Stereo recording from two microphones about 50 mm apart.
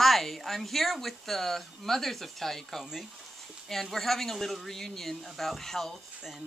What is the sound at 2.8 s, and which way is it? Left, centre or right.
Speech, centre.